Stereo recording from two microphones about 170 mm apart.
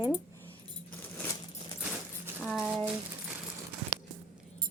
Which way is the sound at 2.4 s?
5° right (ahead or behind).